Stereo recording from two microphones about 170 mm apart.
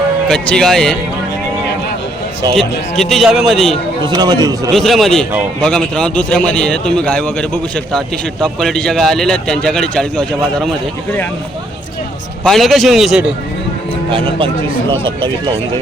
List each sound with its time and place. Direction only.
0.3 s a man's voice: 5° left (ahead or behind)
2.6 s a man's voice: centre (ahead or behind)
4.0 s speech: 25° right (ahead or behind)
4.7 s a man's voice: centre (ahead or behind)
12.5 s a man's voice: centre (ahead or behind)
14.1 s a man's voice: 30° right (ahead or behind)